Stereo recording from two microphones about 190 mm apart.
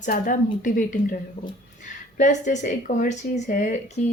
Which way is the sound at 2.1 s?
40° left (ahead or behind).